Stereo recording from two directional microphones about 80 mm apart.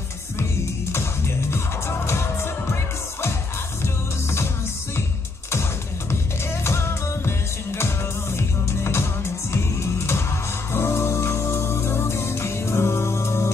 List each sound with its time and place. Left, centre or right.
0.9 s music: left
5.5 s music: left